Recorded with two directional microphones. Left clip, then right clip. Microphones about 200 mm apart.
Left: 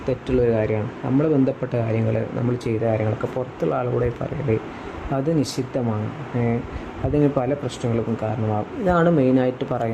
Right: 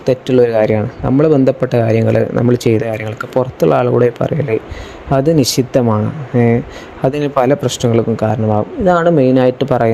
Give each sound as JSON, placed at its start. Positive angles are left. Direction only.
{"t": 0.0, "sound": "speech", "side_deg": -45}
{"t": 7.1, "sound": "speech", "side_deg": -45}